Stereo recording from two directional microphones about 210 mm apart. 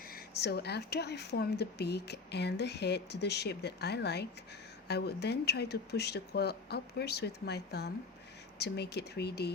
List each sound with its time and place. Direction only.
0.1 s speech: 50° left (ahead or behind)